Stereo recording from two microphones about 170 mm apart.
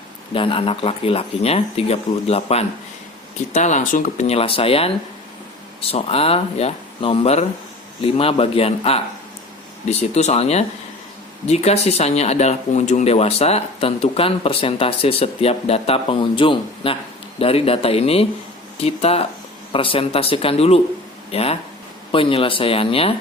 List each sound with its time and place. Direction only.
0.3 s speech: 30° left (ahead or behind)
5.9 s speech: 35° left (ahead or behind)
10.2 s speech: 40° left (ahead or behind)